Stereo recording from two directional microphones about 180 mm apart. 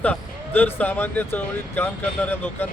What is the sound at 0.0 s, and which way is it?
Speech, 10° left (ahead or behind).